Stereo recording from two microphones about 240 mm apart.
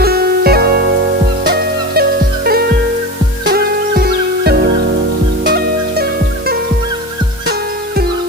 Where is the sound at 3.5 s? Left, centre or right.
Right.